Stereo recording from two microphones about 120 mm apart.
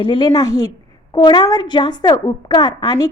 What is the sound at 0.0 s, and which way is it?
Speech, 40° left (ahead or behind).